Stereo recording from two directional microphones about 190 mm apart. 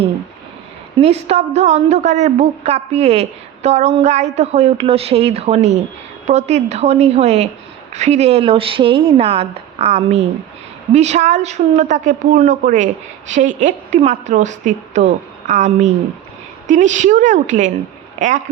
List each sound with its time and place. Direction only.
1.0 s a woman's voice: 35° right (ahead or behind)